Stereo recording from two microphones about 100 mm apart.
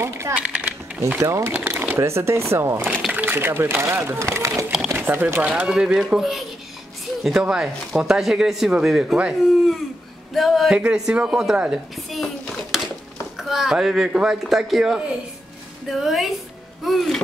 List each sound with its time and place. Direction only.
0.4 s speech: 10° right (ahead or behind)
1.0 s speech: 25° right (ahead or behind)
4.9 s speech: 20° right (ahead or behind)
5.5 s a woman's voice: 5° right (ahead or behind)
13.4 s speech: 5° right (ahead or behind)